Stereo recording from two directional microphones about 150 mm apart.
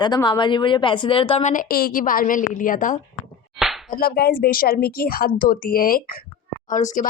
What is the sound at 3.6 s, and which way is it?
Slap, centre (ahead or behind).